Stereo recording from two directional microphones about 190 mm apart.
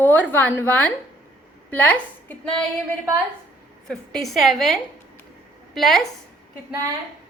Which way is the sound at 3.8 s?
Centre (ahead or behind).